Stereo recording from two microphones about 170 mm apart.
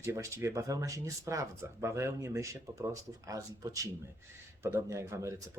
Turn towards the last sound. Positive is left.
turn(degrees=-15)  # may be behind; listen again after turning